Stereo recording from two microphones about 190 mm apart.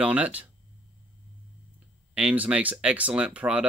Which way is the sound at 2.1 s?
5° right (ahead or behind).